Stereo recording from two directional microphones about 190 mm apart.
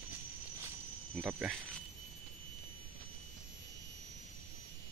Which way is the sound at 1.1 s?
5° right (ahead or behind).